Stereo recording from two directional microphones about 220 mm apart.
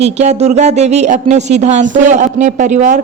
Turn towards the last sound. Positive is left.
turn(degrees=-35)  # may be behind; listen again after turning